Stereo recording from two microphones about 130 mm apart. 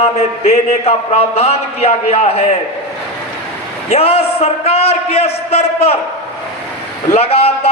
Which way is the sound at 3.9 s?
50° left (ahead or behind).